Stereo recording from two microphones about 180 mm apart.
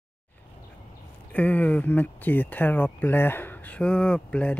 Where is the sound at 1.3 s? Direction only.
10° left (ahead or behind).